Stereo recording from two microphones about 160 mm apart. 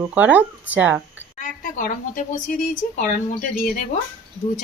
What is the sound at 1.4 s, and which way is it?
Speech, 55° left (ahead or behind).